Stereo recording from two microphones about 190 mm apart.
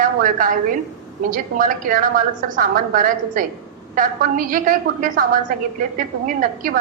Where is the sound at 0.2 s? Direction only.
45° right (ahead or behind).